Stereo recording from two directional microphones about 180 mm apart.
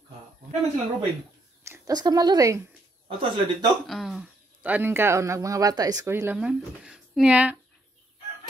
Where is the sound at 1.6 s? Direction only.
20° right (ahead or behind).